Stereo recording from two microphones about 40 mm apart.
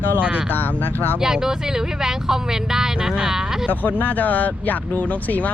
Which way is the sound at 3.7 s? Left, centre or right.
Left.